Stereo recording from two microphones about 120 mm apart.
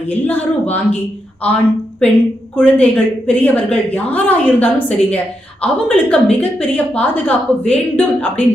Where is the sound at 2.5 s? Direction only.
10° left (ahead or behind).